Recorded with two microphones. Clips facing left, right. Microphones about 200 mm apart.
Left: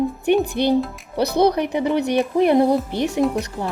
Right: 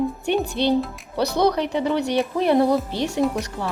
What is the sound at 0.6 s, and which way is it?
A woman's voice, 15° left (ahead or behind).